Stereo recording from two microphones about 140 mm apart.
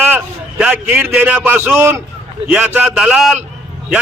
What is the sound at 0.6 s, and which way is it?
A man's voice, 10° right (ahead or behind).